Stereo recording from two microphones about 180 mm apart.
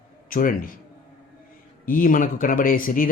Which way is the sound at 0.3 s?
50° left (ahead or behind).